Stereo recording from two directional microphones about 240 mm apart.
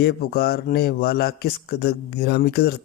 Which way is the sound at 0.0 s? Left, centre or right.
Left.